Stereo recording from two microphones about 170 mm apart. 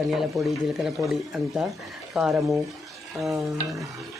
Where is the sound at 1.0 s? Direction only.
20° right (ahead or behind).